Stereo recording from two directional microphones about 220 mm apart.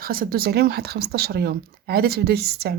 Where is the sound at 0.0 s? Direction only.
40° right (ahead or behind).